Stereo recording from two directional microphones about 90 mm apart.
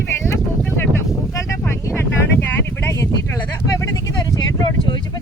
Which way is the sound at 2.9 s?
35° left (ahead or behind).